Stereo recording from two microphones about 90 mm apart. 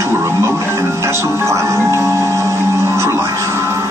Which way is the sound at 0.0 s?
30° right (ahead or behind).